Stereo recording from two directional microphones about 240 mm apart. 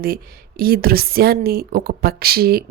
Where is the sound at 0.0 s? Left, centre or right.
Right.